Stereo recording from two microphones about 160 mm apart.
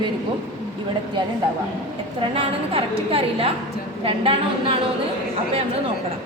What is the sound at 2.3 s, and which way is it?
A woman's voice, 35° right (ahead or behind).